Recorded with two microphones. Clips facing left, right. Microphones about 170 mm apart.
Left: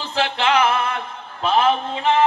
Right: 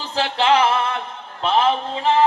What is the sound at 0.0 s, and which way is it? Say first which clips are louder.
Music: even; 35° right (ahead or behind).